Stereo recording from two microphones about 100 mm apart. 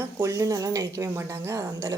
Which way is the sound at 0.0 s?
30° right (ahead or behind).